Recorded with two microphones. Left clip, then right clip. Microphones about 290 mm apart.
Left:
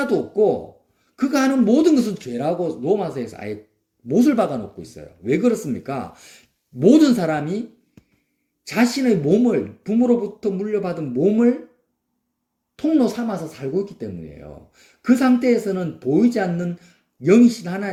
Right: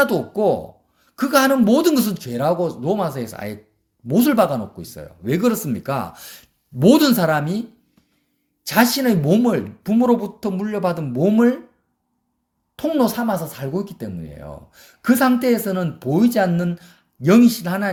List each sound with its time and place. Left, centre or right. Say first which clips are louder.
0.0 s speech: right 1 dB; right
8.6 s speech: right 3 dB; right
12.8 s speech: even; right